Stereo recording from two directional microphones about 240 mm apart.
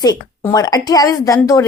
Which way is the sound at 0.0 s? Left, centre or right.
Centre.